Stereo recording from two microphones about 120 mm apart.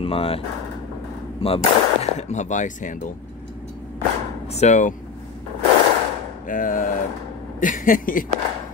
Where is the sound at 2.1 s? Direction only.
75° left (ahead or behind).